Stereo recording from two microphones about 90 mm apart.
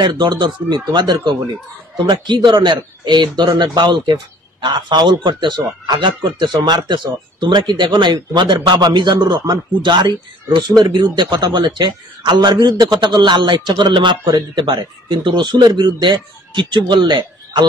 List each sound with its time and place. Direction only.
0.0 s speech: 55° right (ahead or behind)